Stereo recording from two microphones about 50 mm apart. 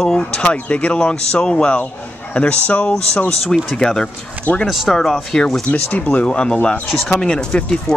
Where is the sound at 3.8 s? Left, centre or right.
Centre.